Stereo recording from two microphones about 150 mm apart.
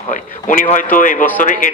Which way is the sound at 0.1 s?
60° left (ahead or behind).